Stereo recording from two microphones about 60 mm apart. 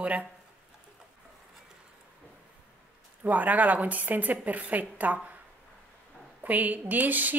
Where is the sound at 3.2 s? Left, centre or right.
Right.